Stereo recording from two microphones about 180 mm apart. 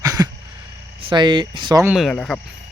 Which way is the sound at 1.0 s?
25° right (ahead or behind).